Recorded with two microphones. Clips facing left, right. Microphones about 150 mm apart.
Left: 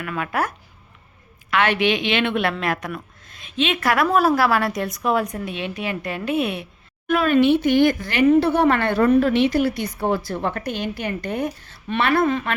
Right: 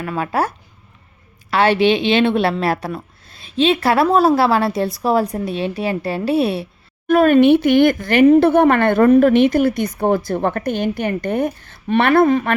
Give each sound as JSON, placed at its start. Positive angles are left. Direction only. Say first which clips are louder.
{"t": 0.0, "sound": "a woman's voice", "louder": "right 4 dB", "side_deg": -30}
{"t": 7.1, "sound": "speech", "louder": "right 6 dB", "side_deg": -45}